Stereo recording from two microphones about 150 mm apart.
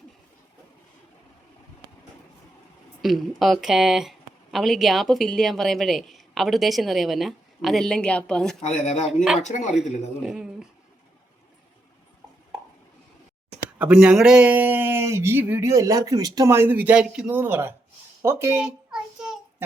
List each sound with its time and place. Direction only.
3.0 s a woman's voice: centre (ahead or behind)
8.6 s speech: 50° left (ahead or behind)
10.2 s a sound: 5° right (ahead or behind)
13.7 s speech: 5° right (ahead or behind)
18.6 s child singing: 5° right (ahead or behind)